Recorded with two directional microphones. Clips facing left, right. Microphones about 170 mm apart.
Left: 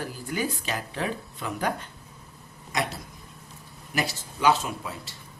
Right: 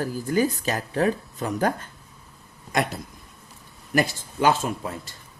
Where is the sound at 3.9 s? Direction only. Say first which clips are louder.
Right 6 dB; 50° right (ahead or behind).